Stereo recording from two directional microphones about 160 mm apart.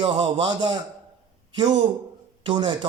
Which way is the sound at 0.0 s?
30° right (ahead or behind).